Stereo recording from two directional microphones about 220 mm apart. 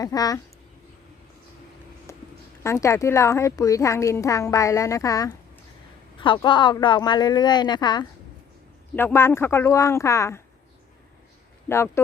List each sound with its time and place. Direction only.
0.0 s a woman's voice: 15° left (ahead or behind)
2.1 s a sound: 10° left (ahead or behind)
2.6 s a woman's voice: 15° left (ahead or behind)